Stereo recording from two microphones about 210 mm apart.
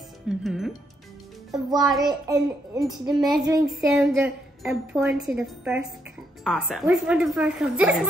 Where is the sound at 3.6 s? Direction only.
5° right (ahead or behind).